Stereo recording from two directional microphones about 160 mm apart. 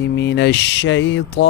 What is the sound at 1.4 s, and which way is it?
Speech, 90° left.